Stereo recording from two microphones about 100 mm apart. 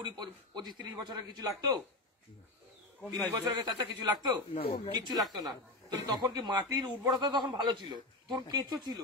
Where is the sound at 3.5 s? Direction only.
45° right (ahead or behind).